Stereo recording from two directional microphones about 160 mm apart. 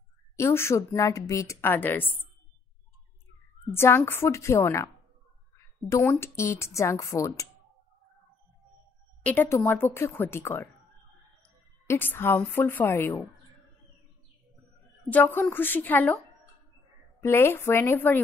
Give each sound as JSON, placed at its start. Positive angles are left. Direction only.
{"t": 0.4, "sound": "a woman's voice", "side_deg": 15}
{"t": 3.7, "sound": "a woman's voice", "side_deg": 15}
{"t": 9.2, "sound": "a woman's voice", "side_deg": 10}
{"t": 11.9, "sound": "a woman's voice", "side_deg": 15}
{"t": 15.0, "sound": "a woman's voice", "side_deg": 10}
{"t": 17.2, "sound": "a woman's voice", "side_deg": 15}